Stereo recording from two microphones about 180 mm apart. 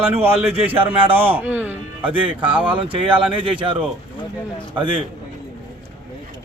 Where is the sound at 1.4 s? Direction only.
10° right (ahead or behind).